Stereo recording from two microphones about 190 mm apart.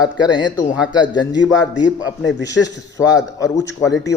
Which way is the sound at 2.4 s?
20° left (ahead or behind).